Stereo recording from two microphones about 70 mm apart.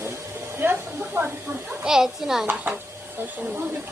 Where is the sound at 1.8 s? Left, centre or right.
Centre.